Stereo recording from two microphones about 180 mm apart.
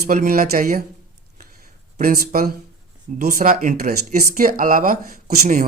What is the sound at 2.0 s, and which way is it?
Speech, 55° right (ahead or behind).